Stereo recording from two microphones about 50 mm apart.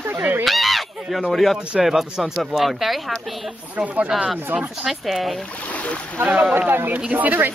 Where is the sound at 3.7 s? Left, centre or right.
Right.